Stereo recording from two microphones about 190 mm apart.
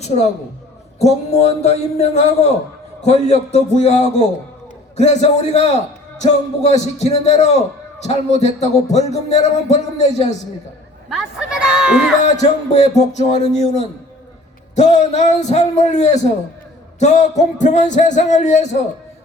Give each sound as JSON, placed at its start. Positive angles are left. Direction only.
{"t": 0.9, "sound": "speech", "side_deg": 35}
{"t": 11.1, "sound": "speech", "side_deg": -5}
{"t": 12.2, "sound": "speech", "side_deg": 35}